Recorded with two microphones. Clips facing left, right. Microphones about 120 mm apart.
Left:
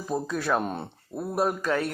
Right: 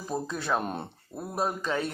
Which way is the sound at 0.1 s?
5° left (ahead or behind).